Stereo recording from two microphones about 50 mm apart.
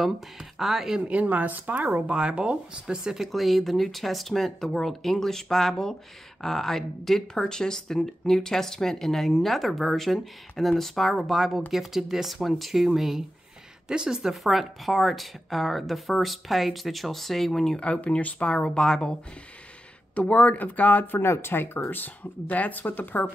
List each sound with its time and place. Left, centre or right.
0.0 s speech: centre
0.9 s speech: right
2.0 s speech: right
3.3 s speech: centre
17.7 s speech: left
20.2 s speech: left
21.2 s speech: left
21.9 s speech: left